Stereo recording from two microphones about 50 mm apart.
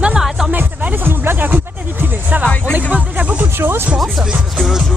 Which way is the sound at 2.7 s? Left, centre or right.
Right.